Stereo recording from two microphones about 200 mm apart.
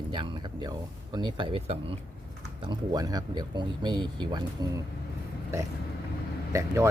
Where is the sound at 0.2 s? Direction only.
25° right (ahead or behind).